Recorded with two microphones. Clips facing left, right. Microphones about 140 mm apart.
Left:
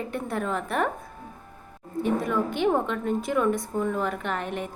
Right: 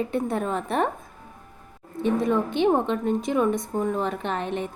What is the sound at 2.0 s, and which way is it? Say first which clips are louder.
A woman's voice: right 3 dB; 20° right (ahead or behind).